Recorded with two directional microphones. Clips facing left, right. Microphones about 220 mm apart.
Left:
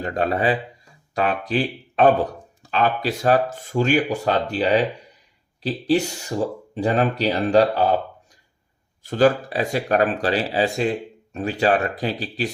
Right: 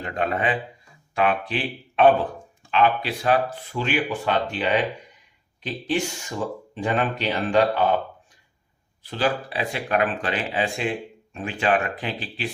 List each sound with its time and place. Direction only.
0.0 s speech: 35° left (ahead or behind)
9.0 s speech: 45° left (ahead or behind)